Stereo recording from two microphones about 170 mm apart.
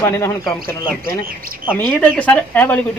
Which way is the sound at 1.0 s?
60° right (ahead or behind).